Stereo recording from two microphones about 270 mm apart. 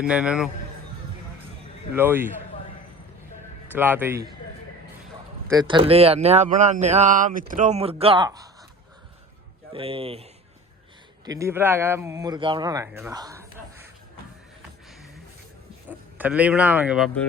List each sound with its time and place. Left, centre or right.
0.0 s a man's voice: centre
1.9 s speech: centre
3.8 s speech: centre
5.5 s speech: centre
9.7 s speech: right
11.3 s speech: centre
15.9 s speech: centre